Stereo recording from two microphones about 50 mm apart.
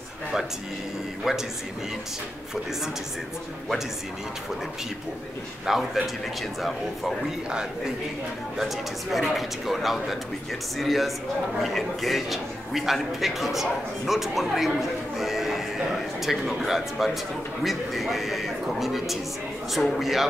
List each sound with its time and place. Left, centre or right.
5.7 s a man's voice: centre
8.5 s a man's voice: centre